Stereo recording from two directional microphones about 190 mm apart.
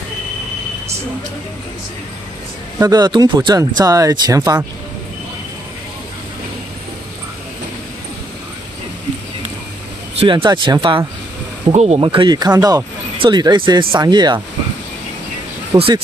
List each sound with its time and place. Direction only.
2.8 s speech: 20° right (ahead or behind)
10.1 s speech: 25° right (ahead or behind)
15.7 s speech: 20° right (ahead or behind)